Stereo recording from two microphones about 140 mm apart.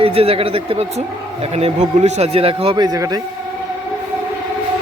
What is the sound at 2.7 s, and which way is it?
Speech, 30° right (ahead or behind).